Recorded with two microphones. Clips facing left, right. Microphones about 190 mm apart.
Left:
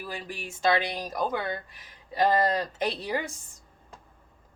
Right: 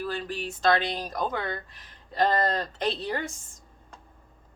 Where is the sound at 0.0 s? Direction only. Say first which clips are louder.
Right 5 dB; 10° left (ahead or behind).